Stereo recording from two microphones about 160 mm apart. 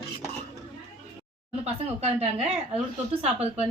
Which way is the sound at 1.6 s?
40° right (ahead or behind).